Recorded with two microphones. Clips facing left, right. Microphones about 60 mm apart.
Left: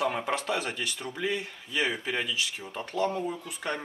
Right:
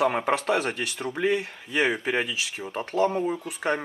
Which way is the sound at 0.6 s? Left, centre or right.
Right.